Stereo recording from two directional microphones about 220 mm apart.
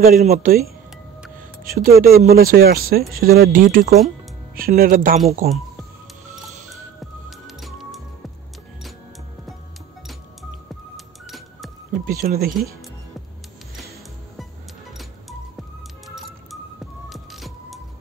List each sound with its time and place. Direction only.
0.2 s speech: 40° right (ahead or behind)
1.6 s speech: 40° right (ahead or behind)
7.2 s music: centre (ahead or behind)
11.2 s music: centre (ahead or behind)
12.0 s speech: 40° right (ahead or behind)
17.1 s music: centre (ahead or behind)